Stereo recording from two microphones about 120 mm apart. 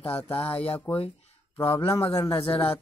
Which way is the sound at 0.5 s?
50° left (ahead or behind).